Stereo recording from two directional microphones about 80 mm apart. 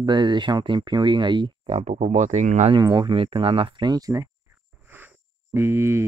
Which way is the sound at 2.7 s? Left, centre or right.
Right.